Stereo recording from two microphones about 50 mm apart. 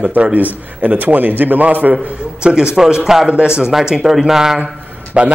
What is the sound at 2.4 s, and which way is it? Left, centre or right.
A man's voice, centre.